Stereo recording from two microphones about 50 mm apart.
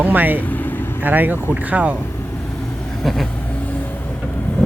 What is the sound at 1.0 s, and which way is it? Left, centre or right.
Speech, right.